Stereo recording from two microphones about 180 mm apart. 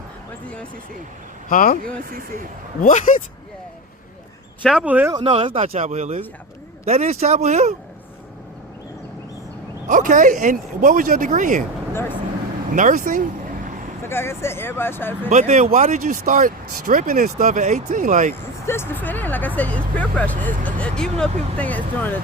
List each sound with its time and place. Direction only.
1.5 s speech: 50° left (ahead or behind)
2.0 s speech: 50° right (ahead or behind)
2.8 s speech: 50° left (ahead or behind)
4.6 s speech: centre (ahead or behind)
5.3 s speech: 30° right (ahead or behind)
9.9 s speech: 45° right (ahead or behind)
12.7 s speech: 45° right (ahead or behind)
14.0 s speech: 15° left (ahead or behind)
15.3 s speech: 40° right (ahead or behind)
18.6 s speech: 15° left (ahead or behind)